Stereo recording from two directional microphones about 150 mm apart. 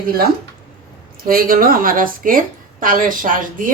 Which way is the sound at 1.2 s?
75° right (ahead or behind).